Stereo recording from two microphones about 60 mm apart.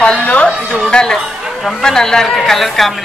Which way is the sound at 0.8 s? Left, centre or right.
Centre.